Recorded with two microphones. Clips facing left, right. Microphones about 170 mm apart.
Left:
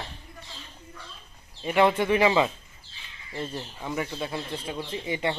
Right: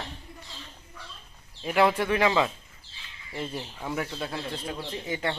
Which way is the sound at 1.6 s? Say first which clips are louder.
Left 1 dB; centre (ahead or behind).